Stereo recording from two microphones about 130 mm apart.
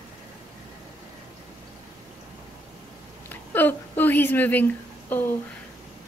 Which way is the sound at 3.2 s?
15° left (ahead or behind).